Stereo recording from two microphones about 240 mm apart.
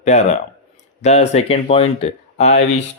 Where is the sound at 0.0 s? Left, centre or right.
Left.